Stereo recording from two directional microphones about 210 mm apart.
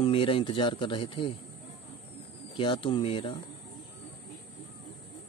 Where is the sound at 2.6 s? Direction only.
25° left (ahead or behind).